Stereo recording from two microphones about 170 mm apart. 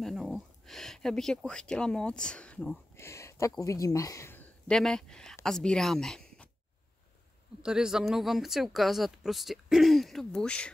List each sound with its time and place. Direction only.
0.0 s speech: centre (ahead or behind)
3.0 s speech: 15° left (ahead or behind)
4.6 s a woman's voice: 5° left (ahead or behind)
7.6 s speech: 5° right (ahead or behind)